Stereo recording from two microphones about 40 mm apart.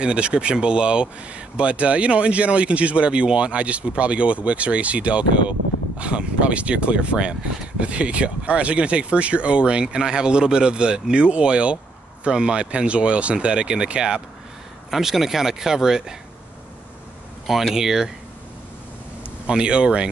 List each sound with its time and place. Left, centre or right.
0.0 s speech: right
14.9 s speech: centre
17.7 s speech: centre
19.4 s speech: right